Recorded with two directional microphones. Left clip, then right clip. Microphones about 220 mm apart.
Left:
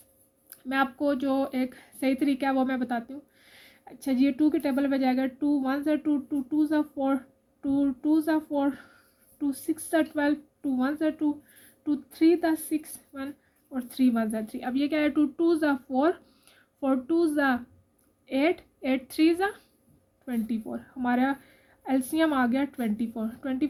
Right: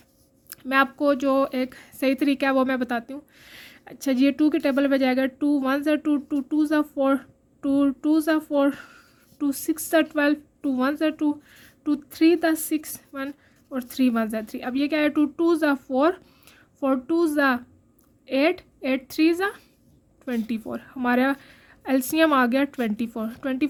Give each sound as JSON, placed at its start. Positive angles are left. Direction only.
{"t": 0.5, "sound": "a woman's voice", "side_deg": -35}